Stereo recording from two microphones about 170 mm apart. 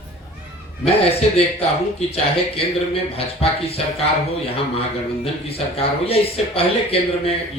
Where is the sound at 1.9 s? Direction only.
35° left (ahead or behind).